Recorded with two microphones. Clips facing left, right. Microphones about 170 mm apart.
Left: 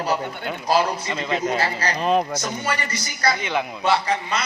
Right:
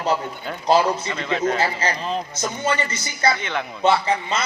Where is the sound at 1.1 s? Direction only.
15° left (ahead or behind).